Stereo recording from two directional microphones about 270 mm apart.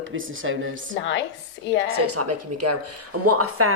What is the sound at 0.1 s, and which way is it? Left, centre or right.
Speech, right.